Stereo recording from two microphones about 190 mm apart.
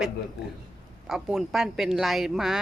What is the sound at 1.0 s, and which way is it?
A woman's voice, centre (ahead or behind).